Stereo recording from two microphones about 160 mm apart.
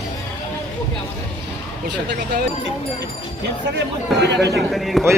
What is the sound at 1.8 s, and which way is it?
Speech, 90° right.